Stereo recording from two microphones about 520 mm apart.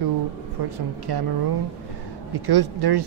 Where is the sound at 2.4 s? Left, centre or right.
Right.